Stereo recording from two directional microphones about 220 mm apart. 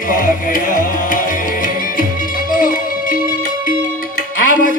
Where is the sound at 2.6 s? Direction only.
35° left (ahead or behind).